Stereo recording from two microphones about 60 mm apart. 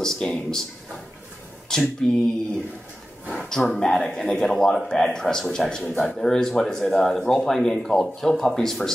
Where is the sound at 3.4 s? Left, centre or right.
Centre.